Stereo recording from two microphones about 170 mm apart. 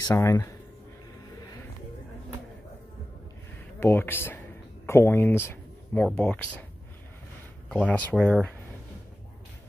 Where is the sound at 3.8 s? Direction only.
10° left (ahead or behind).